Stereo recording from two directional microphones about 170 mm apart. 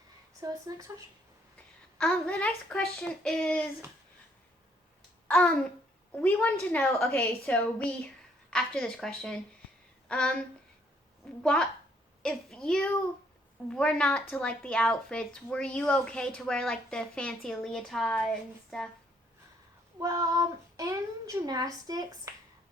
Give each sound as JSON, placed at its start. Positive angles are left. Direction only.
{"t": 0.4, "sound": "a child's voice", "side_deg": -20}
{"t": 2.0, "sound": "a woman's voice", "side_deg": 5}
{"t": 5.3, "sound": "a woman's voice", "side_deg": 5}
{"t": 11.4, "sound": "a woman's voice", "side_deg": 5}
{"t": 20.0, "sound": "a child's voice", "side_deg": -20}